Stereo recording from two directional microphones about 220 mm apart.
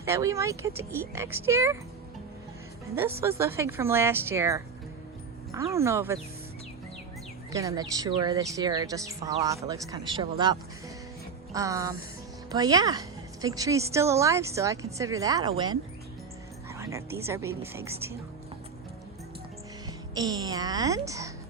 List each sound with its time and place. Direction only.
0.0 s a woman's voice: 15° right (ahead or behind)
3.2 s a woman's voice: 10° right (ahead or behind)
7.5 s a woman's voice: 15° right (ahead or behind)
20.1 s a woman's voice: 15° right (ahead or behind)